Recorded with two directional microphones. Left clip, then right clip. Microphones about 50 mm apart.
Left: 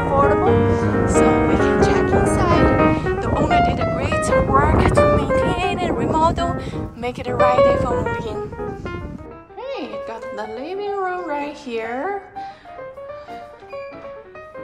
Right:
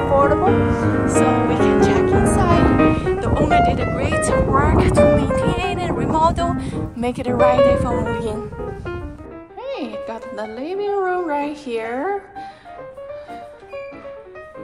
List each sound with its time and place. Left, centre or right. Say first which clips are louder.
0.0 s music: right 1 dB; centre
3.0 s music: right 1 dB; centre
6.3 s speech: right 1 dB; centre
6.8 s music: right 3 dB; centre
7.4 s speech: even; left
8.0 s speech: right 1 dB; centre
8.5 s music: even; centre
9.6 s music: right 1 dB; left
10.3 s speech: right 3 dB; left